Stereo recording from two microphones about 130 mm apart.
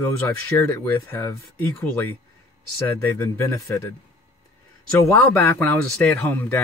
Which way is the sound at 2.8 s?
20° left (ahead or behind).